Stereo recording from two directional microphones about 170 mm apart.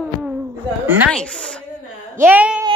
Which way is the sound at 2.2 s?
10° right (ahead or behind).